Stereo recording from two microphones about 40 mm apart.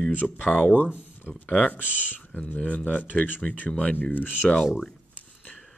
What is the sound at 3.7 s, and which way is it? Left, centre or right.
Speech, left.